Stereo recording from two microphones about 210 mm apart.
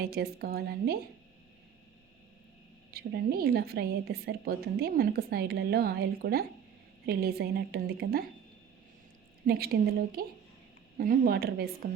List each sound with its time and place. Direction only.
0.0 s a woman's voice: 50° right (ahead or behind)
2.9 s a woman's voice: 45° right (ahead or behind)
9.5 s a woman's voice: 40° right (ahead or behind)